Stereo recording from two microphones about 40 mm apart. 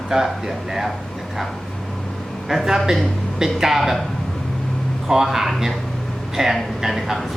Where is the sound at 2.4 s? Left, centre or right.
Centre.